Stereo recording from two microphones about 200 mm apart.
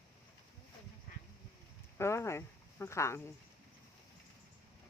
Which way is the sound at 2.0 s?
15° left (ahead or behind).